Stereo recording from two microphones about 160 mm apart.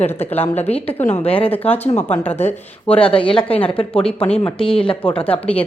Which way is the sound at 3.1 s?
35° left (ahead or behind).